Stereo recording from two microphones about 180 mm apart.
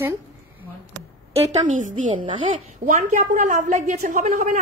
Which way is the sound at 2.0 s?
30° right (ahead or behind).